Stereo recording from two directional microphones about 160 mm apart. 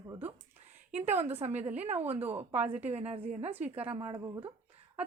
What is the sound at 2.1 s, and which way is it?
Speech, 10° right (ahead or behind).